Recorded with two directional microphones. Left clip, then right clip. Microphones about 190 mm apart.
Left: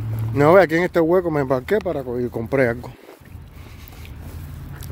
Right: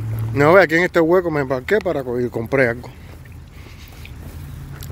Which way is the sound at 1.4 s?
25° left (ahead or behind).